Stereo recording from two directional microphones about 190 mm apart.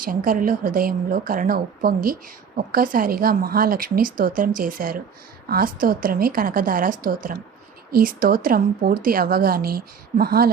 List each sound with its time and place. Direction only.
0.0 s a woman's voice: 50° right (ahead or behind)